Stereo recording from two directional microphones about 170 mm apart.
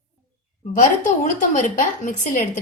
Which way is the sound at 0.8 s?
50° left (ahead or behind).